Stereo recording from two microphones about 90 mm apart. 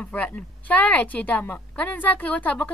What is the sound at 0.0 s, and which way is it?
A woman's voice, 15° left (ahead or behind).